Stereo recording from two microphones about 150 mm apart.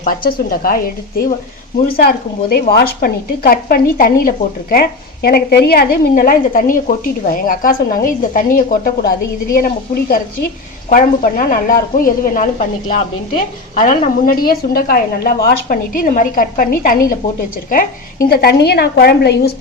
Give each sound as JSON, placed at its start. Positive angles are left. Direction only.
{"t": 0.0, "sound": "a woman's voice", "side_deg": 70}
{"t": 2.0, "sound": "a woman's voice", "side_deg": 90}
{"t": 10.8, "sound": "a woman's voice", "side_deg": 65}
{"t": 13.7, "sound": "a woman's voice", "side_deg": 55}